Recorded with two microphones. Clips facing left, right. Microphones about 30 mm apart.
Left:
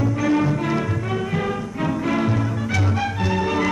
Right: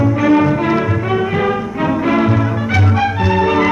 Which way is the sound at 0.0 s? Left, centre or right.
Right.